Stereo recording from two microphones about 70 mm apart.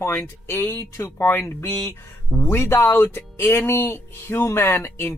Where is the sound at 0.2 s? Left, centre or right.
Left.